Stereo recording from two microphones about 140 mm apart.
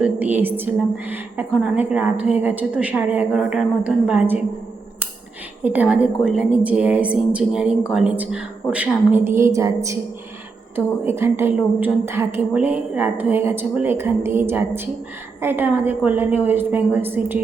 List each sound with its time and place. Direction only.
0.0 s a woman's voice: 10° right (ahead or behind)
5.6 s a woman's voice: 10° right (ahead or behind)